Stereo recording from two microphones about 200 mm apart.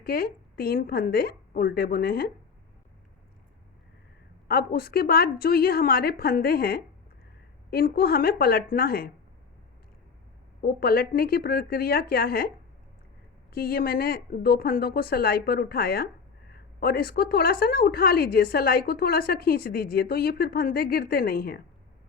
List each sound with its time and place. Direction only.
0.0 s a woman's voice: 50° left (ahead or behind)
4.4 s a woman's voice: 50° left (ahead or behind)
10.6 s a woman's voice: 50° left (ahead or behind)
13.5 s a woman's voice: 50° left (ahead or behind)